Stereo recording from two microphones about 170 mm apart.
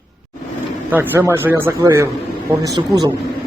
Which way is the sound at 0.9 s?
10° right (ahead or behind).